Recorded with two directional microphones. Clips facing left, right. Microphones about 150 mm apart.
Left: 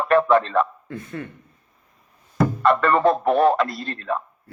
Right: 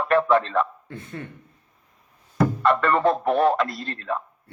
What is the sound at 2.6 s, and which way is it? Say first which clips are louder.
Speech: left 3 dB; 45° left (ahead or behind).